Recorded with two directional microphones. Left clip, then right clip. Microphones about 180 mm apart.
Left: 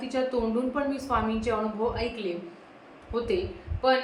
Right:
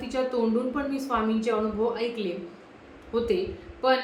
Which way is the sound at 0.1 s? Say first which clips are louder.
Right 1 dB; 5° right (ahead or behind).